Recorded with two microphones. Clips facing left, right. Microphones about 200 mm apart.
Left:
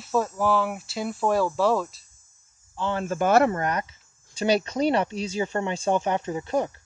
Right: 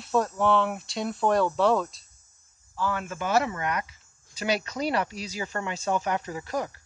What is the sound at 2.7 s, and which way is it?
Speech, 25° left (ahead or behind).